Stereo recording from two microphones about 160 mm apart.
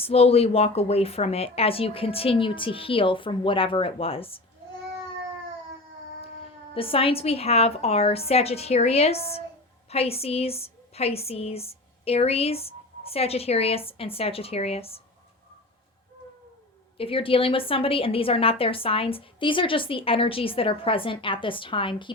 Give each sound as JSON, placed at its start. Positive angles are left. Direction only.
{"t": 0.0, "sound": "a woman's voice", "side_deg": 40}
{"t": 6.7, "sound": "a woman's voice", "side_deg": 35}
{"t": 17.0, "sound": "a woman's voice", "side_deg": 35}